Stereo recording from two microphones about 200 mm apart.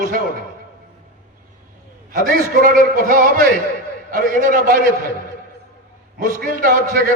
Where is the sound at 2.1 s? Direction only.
45° right (ahead or behind).